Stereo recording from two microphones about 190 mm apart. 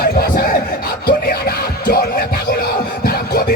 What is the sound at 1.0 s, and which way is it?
Music, 55° left (ahead or behind).